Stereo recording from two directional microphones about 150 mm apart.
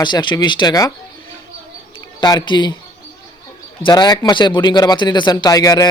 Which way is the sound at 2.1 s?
30° left (ahead or behind).